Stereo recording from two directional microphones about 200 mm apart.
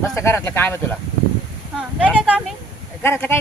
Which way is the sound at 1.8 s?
5° right (ahead or behind).